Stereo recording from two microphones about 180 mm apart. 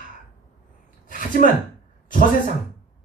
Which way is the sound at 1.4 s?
45° left (ahead or behind).